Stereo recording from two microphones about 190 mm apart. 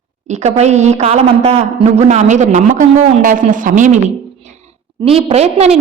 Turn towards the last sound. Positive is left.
turn(degrees=-35)  # may be behind; listen again after turning